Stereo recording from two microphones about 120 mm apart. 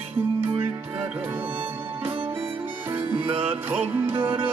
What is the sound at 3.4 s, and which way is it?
Music, 15° right (ahead or behind).